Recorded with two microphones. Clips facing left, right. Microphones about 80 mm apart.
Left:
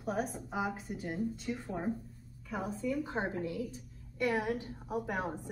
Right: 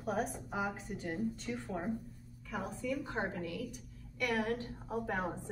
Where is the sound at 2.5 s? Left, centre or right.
Centre.